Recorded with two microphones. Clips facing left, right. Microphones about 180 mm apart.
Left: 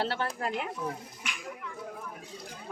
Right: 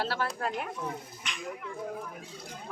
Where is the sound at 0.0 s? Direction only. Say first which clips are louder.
Even; 20° left (ahead or behind).